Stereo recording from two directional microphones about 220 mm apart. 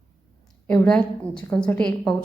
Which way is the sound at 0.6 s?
5° left (ahead or behind).